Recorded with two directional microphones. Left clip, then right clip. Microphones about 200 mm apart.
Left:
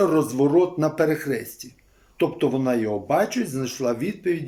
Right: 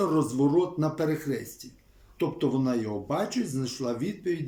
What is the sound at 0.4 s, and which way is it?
Speech, 20° right (ahead or behind).